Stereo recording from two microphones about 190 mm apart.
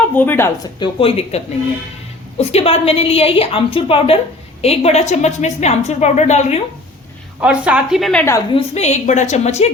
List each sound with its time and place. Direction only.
0.1 s a woman's voice: 10° left (ahead or behind)
0.8 s a woman's voice: 30° left (ahead or behind)
2.4 s a woman's voice: 35° left (ahead or behind)
7.4 s a woman's voice: 5° right (ahead or behind)
8.5 s a woman's voice: 35° left (ahead or behind)